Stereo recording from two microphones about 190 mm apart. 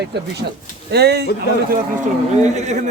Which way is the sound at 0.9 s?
60° right (ahead or behind).